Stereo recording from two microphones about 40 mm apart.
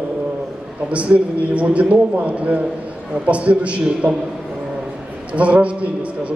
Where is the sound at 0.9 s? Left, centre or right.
Right.